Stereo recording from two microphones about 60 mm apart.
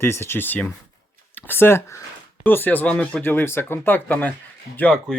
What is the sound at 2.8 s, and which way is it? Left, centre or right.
Speech, centre.